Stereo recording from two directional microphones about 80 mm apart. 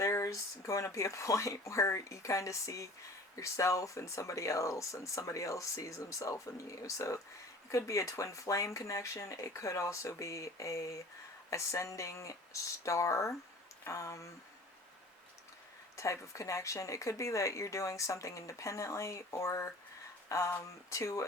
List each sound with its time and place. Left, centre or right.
0.0 s speech: left
16.0 s speech: left